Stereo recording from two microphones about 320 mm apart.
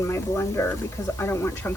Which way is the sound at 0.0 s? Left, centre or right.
Centre.